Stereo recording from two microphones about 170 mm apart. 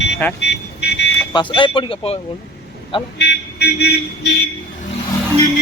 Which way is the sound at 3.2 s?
75° left (ahead or behind).